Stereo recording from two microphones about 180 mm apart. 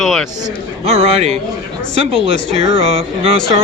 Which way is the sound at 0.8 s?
35° right (ahead or behind).